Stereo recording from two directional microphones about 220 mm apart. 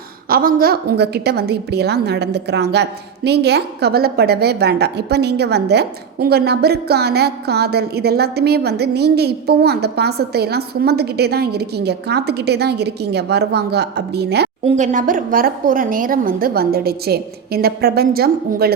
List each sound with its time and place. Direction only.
0.3 s a woman's voice: 40° right (ahead or behind)
14.6 s a woman's voice: 30° right (ahead or behind)